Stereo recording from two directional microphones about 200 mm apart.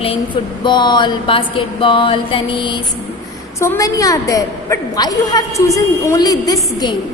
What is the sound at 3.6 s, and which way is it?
A woman's voice, 15° left (ahead or behind).